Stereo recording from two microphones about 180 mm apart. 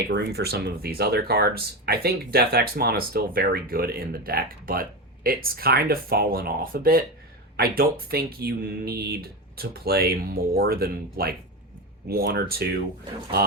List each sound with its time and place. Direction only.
0.1 s speech: 65° right (ahead or behind)